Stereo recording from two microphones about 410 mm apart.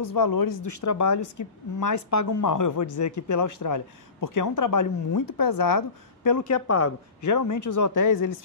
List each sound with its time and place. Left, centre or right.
0.0 s speech: left